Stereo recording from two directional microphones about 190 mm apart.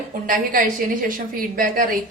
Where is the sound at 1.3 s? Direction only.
45° right (ahead or behind).